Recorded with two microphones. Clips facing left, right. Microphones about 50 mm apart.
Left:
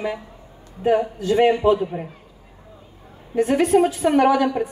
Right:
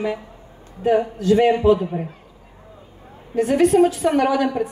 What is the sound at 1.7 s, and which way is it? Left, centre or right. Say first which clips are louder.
Speech: right 2 dB; centre.